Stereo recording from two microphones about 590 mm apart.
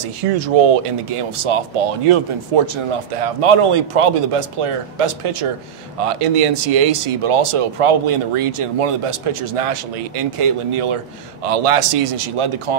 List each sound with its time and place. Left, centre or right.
0.6 s speech: right